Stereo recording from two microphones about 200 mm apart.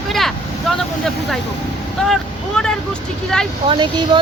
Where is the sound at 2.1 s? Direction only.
5° left (ahead or behind).